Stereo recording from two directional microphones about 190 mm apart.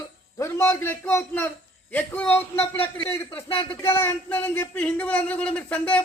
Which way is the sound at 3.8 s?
10° left (ahead or behind).